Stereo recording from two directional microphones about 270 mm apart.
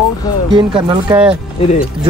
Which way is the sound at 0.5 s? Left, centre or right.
Centre.